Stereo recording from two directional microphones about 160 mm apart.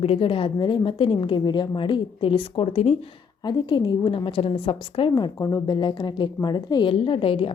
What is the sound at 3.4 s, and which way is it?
A woman's voice, 25° left (ahead or behind).